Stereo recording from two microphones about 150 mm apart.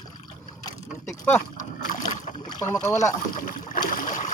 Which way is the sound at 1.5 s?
55° left (ahead or behind).